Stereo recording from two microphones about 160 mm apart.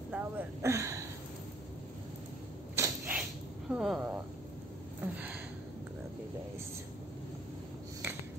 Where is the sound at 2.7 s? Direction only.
15° right (ahead or behind).